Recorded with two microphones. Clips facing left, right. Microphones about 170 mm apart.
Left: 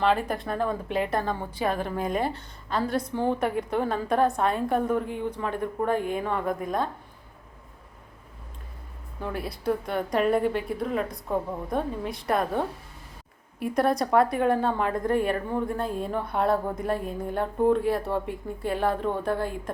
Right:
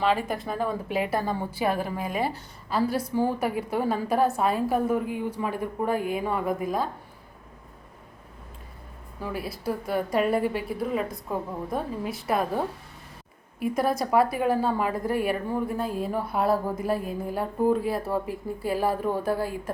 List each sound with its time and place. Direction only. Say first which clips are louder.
0.0 s a woman's voice: left 1 dB; 5° right (ahead or behind)
9.2 s a woman's voice: left 2 dB; 5° right (ahead or behind)